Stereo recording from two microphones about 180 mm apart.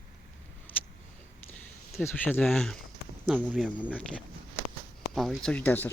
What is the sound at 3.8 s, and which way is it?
Speech, 10° left (ahead or behind).